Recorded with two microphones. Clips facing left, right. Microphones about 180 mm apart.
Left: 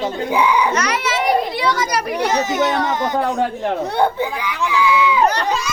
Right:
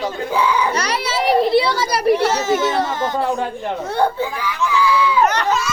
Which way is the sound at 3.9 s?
20° left (ahead or behind).